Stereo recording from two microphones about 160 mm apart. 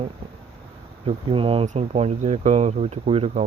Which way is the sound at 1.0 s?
35° right (ahead or behind).